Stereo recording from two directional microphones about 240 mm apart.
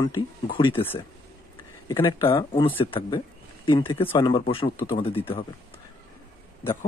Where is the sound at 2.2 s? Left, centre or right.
Left.